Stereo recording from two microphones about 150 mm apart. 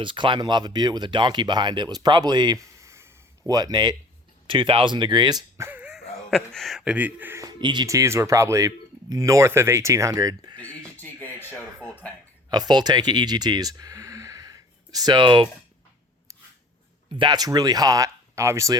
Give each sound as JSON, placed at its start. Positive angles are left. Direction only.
{"t": 0.0, "sound": "speech", "side_deg": -35}
{"t": 5.6, "sound": "speech", "side_deg": -10}
{"t": 7.4, "sound": "speech", "side_deg": -30}
{"t": 10.8, "sound": "a sound", "side_deg": 10}
{"t": 11.8, "sound": "a sound", "side_deg": -15}
{"t": 12.5, "sound": "speech", "side_deg": -30}
{"t": 17.1, "sound": "speech", "side_deg": -30}